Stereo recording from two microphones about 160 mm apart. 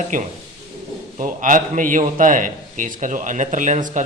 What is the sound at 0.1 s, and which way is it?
A man's voice, 55° right (ahead or behind).